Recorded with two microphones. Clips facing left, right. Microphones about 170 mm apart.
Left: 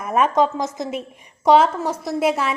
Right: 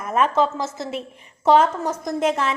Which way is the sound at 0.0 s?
15° left (ahead or behind).